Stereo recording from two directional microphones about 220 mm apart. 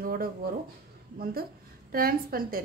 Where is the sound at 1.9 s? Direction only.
40° right (ahead or behind).